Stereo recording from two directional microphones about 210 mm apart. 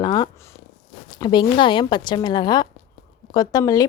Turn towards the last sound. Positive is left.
turn(degrees=15)  # may be behind; listen again after turning